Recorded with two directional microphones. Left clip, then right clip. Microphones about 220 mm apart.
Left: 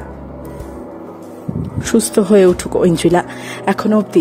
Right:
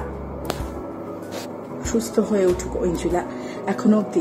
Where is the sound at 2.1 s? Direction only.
45° left (ahead or behind).